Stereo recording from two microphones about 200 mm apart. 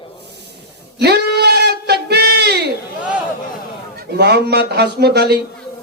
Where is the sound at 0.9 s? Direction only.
55° right (ahead or behind).